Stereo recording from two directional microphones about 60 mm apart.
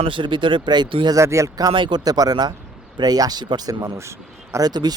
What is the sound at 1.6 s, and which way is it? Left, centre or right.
Speech, right.